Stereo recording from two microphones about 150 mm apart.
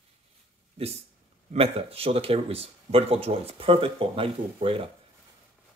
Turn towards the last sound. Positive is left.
turn(degrees=-35)  # may be behind; listen again after turning